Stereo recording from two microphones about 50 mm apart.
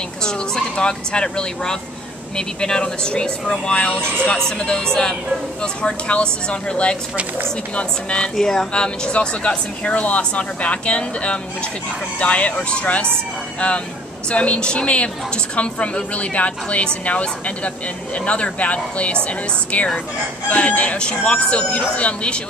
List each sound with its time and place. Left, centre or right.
0.2 s a woman's voice: centre
8.4 s a woman's voice: centre
14.3 s a woman's voice: left